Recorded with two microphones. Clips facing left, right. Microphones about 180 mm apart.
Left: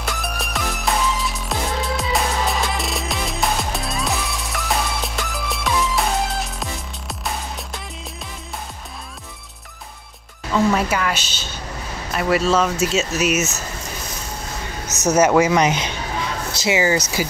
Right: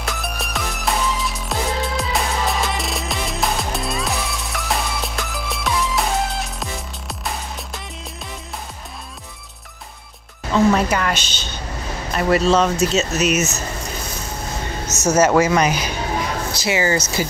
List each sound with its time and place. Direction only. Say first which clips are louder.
0.0 s music: even; centre (ahead or behind)
10.5 s a woman's voice: right 2 dB; centre (ahead or behind)
15.0 s speech: even; 15° left (ahead or behind)